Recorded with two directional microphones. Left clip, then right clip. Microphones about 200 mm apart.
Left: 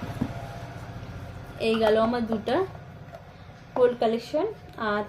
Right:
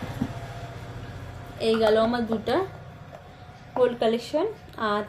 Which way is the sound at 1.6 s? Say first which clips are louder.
Right 1 dB; 5° left (ahead or behind).